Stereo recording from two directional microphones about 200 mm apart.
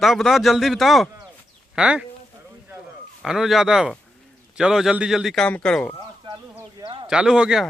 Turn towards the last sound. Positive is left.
turn(degrees=-5)  # may be behind; listen again after turning